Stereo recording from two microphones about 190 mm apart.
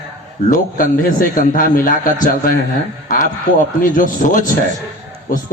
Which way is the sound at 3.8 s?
45° left (ahead or behind).